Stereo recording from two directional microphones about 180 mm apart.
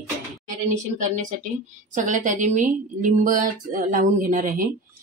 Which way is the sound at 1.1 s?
45° right (ahead or behind).